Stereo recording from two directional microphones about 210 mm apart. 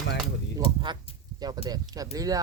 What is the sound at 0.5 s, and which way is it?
Speech, 20° right (ahead or behind).